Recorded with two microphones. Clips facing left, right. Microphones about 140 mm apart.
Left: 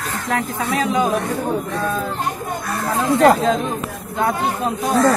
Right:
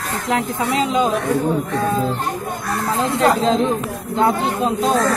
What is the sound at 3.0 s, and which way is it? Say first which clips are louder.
Speech: left 3 dB; 20° right (ahead or behind).